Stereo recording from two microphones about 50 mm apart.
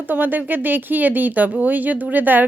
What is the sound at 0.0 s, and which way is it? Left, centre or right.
Speech, right.